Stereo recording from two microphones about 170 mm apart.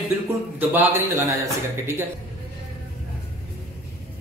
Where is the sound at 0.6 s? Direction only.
15° right (ahead or behind).